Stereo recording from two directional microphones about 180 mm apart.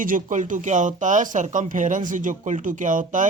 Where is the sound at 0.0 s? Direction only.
45° right (ahead or behind).